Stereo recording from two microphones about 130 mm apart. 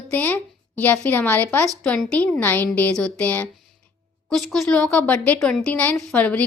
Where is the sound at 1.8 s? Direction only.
5° left (ahead or behind).